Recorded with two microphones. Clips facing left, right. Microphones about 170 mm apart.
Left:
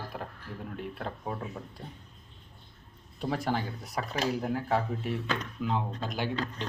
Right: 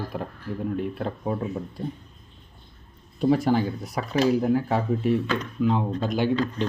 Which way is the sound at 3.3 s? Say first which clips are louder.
Right 8 dB; 5° right (ahead or behind).